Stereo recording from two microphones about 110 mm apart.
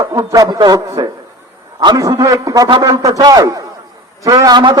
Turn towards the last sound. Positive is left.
turn(degrees=-40)  # may be behind; listen again after turning